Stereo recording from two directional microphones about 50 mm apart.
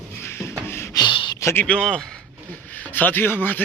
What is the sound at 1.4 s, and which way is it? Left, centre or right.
Speech, left.